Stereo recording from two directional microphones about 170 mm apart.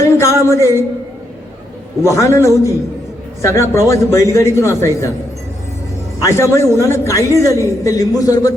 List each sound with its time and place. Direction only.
0.0 s a sound: 15° left (ahead or behind)
2.0 s a man's voice: 15° left (ahead or behind)
6.1 s a man's voice: 15° left (ahead or behind)